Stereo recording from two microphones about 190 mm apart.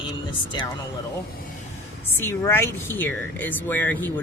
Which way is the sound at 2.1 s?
15° left (ahead or behind).